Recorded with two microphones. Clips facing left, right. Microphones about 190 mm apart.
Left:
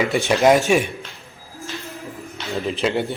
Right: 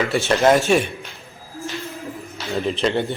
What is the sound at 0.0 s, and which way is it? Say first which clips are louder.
Speech: left 1 dB; 15° left (ahead or behind).